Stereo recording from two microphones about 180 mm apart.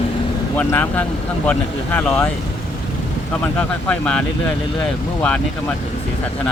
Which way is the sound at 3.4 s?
10° left (ahead or behind).